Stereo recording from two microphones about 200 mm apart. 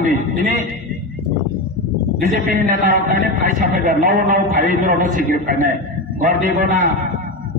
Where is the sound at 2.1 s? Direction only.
40° right (ahead or behind).